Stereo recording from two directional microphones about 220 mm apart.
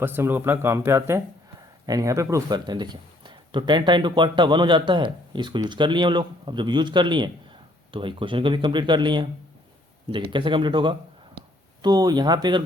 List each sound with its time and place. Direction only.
0.0 s speech: 10° right (ahead or behind)